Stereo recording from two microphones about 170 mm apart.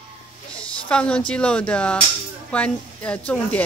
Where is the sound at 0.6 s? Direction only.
5° left (ahead or behind).